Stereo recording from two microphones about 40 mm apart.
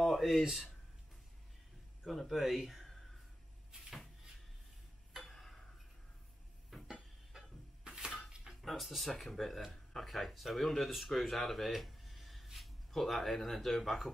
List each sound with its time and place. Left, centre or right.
0.0 s speech: centre
2.0 s speech: centre
3.7 s cupboard open or close: right
5.3 s tick-tock: centre
6.9 s a sound: centre
7.8 s a sound: centre
8.5 s speech: centre